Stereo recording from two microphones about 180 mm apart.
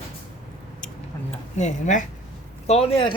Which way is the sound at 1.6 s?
40° left (ahead or behind).